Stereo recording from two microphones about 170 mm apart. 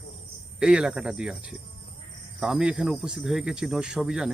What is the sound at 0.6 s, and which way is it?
Speech, 5° right (ahead or behind).